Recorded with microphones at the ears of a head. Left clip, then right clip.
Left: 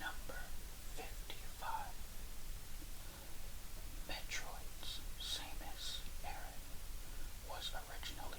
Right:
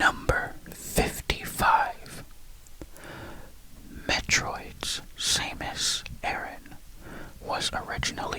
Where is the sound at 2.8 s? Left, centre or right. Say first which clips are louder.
Right 19 dB; right.